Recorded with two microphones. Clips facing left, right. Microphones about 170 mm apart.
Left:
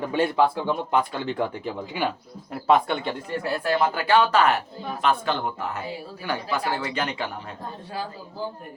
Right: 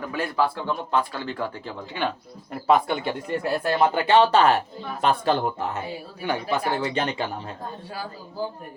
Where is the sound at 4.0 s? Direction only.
25° right (ahead or behind).